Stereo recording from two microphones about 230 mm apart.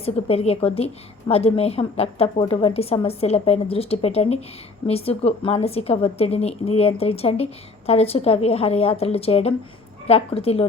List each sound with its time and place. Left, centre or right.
0.0 s a woman's voice: left